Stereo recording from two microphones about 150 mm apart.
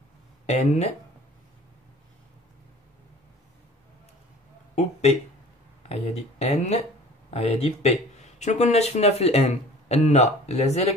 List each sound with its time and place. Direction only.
0.5 s speech: 50° left (ahead or behind)
5.9 s speech: 45° left (ahead or behind)